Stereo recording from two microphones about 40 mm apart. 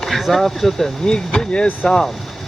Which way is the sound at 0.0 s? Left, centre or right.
Centre.